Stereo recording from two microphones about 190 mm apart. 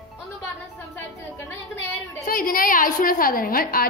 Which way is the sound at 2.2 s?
50° left (ahead or behind).